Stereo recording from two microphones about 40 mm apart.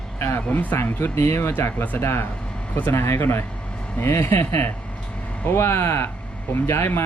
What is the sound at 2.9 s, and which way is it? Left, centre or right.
Speech, left.